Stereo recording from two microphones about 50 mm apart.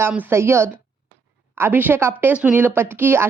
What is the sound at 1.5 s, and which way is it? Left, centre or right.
Speech, right.